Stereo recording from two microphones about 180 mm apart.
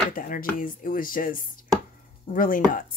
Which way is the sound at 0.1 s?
50° left (ahead or behind).